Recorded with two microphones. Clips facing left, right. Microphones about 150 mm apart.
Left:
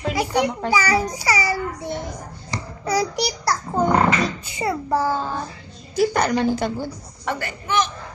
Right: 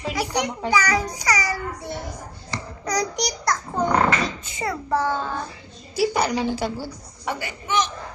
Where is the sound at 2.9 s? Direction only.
5° left (ahead or behind).